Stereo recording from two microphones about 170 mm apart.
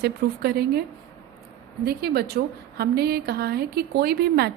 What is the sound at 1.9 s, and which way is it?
A woman's voice, 65° right (ahead or behind).